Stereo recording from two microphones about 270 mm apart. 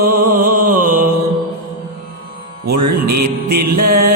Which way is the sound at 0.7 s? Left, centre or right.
Right.